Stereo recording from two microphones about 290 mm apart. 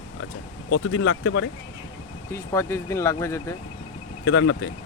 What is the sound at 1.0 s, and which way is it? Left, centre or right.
Speech, left.